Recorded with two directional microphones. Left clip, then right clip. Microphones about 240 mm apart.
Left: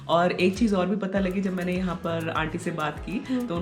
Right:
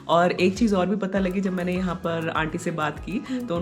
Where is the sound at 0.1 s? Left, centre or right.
Centre.